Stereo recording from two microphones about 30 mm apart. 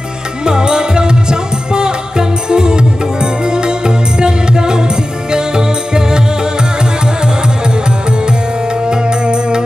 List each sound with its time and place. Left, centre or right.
0.5 s music: right
8.8 s music: right